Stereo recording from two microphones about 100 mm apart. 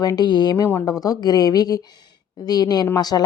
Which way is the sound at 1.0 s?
40° left (ahead or behind).